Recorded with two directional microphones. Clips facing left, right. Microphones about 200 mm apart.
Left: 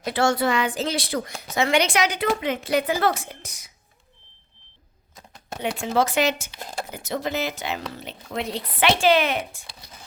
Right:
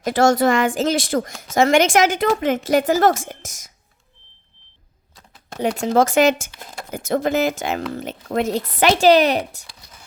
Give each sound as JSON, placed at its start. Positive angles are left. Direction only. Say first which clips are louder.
{"t": 0.0, "sound": "speech", "louder": "right 6 dB", "side_deg": -45}
{"t": 5.6, "sound": "speech", "louder": "right 6 dB", "side_deg": -40}